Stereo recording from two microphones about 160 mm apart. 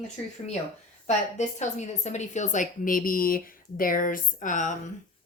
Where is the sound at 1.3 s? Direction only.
45° left (ahead or behind).